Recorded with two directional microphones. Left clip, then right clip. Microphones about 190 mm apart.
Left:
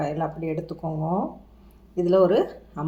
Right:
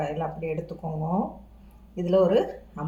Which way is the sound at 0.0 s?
45° left (ahead or behind).